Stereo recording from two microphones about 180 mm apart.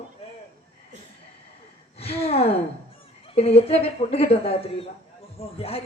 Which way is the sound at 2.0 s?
35° left (ahead or behind).